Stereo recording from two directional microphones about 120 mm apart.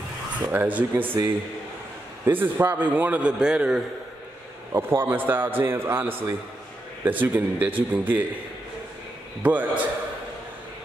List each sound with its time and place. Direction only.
0.5 s a man's voice: 15° right (ahead or behind)
2.2 s a man's voice: 15° right (ahead or behind)
4.7 s a man's voice: 20° right (ahead or behind)
9.4 s a man's voice: 10° right (ahead or behind)